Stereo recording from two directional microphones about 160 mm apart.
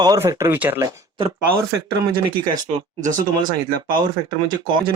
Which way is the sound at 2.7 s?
55° right (ahead or behind).